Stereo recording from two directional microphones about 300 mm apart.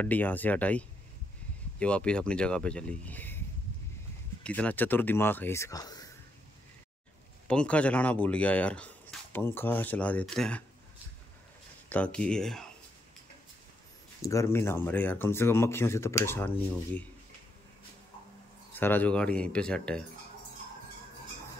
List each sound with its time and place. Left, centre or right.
0.0 s speech: centre
7.4 s speech: centre
11.9 s speech: centre
14.2 s speech: centre
18.7 s speech: centre